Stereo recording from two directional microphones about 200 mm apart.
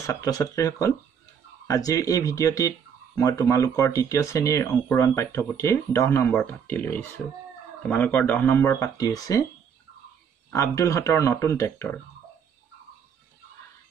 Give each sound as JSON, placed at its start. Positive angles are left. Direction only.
{"t": 0.0, "sound": "speech", "side_deg": 15}
{"t": 10.5, "sound": "speech", "side_deg": 15}